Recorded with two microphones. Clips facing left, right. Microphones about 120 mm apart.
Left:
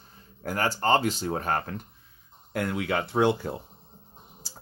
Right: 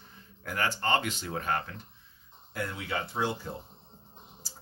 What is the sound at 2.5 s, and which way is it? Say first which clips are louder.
Speech: left 7 dB; 65° left (ahead or behind).